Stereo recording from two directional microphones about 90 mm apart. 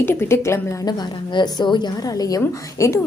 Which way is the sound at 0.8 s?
50° left (ahead or behind).